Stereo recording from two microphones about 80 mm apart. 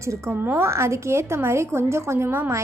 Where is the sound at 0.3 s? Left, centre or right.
Right.